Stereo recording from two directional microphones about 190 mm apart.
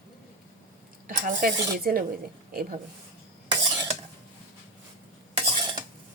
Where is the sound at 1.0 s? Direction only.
45° right (ahead or behind).